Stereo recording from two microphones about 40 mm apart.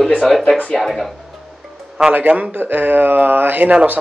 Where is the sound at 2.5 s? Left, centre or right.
Right.